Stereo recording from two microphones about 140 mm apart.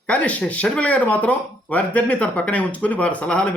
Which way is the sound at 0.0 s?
10° left (ahead or behind).